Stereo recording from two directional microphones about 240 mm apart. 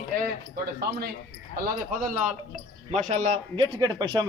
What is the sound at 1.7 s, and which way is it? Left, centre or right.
A man's voice, right.